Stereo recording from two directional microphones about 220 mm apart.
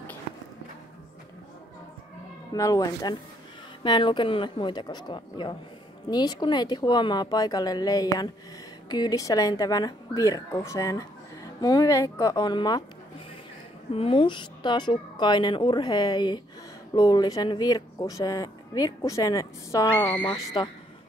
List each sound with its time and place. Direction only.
2.5 s a woman's voice: 15° left (ahead or behind)
13.9 s a woman's voice: 25° left (ahead or behind)